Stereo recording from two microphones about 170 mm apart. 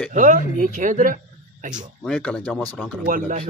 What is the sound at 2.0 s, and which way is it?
Speech, 5° left (ahead or behind).